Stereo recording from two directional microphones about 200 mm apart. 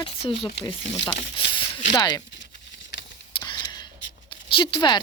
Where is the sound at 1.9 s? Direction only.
20° left (ahead or behind).